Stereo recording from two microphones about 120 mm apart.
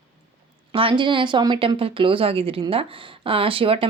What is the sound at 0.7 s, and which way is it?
A woman's voice, 45° right (ahead or behind).